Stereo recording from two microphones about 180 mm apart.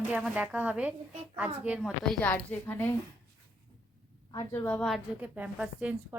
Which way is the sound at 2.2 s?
10° left (ahead or behind).